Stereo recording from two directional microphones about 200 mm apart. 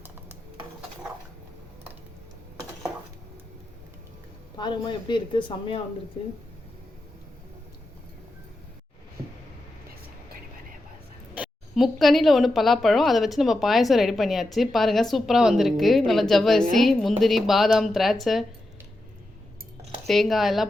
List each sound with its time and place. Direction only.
4.5 s speech: 20° left (ahead or behind)
11.3 s a woman's voice: centre (ahead or behind)
20.1 s a woman's voice: centre (ahead or behind)